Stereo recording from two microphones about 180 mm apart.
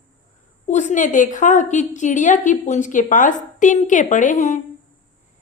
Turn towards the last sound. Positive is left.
turn(degrees=40)  # may be behind; listen again after turning